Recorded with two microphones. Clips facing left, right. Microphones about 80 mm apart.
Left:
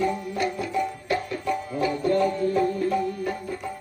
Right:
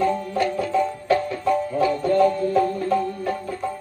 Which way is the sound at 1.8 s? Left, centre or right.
Right.